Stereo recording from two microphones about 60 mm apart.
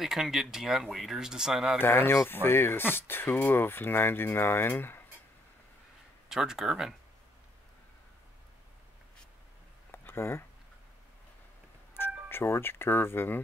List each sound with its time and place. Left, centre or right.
0.0 s speech: centre
1.8 s speech: left
6.2 s speech: centre
9.8 s a sound: left
12.3 s speech: left